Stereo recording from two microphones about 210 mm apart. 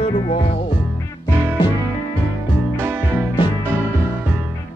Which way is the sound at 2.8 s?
10° right (ahead or behind).